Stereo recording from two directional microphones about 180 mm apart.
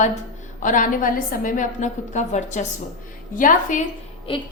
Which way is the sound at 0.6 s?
45° left (ahead or behind).